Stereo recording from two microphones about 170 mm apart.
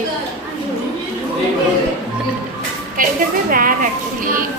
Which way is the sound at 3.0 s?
55° right (ahead or behind).